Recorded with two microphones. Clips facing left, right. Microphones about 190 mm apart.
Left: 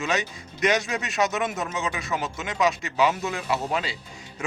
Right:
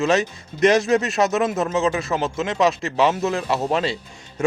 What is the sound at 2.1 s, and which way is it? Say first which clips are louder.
Speech: right 6 dB; 30° right (ahead or behind).